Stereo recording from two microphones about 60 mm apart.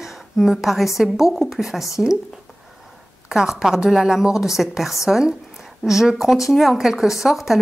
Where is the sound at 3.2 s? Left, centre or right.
Centre.